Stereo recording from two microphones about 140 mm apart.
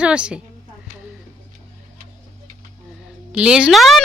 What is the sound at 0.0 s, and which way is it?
Speech, 5° right (ahead or behind).